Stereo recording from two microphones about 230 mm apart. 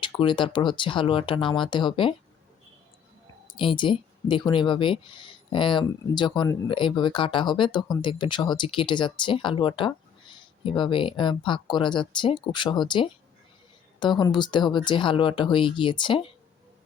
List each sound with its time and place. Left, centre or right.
0.0 s speech: left
3.4 s speech: left